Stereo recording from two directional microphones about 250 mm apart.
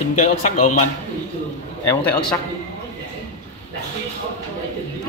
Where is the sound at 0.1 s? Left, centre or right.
Left.